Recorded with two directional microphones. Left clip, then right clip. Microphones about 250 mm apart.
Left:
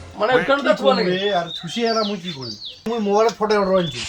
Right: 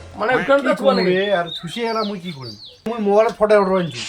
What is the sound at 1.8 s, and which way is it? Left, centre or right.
Speech, right.